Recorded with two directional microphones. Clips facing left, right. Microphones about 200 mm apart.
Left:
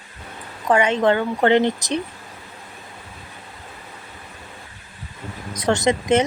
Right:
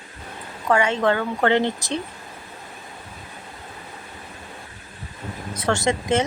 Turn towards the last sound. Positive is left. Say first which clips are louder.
# left 3 dB
turn(degrees=20)  # may be behind; listen again after turning